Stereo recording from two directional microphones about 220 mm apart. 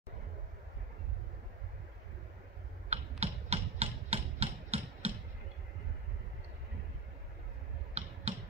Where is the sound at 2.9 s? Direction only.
30° right (ahead or behind).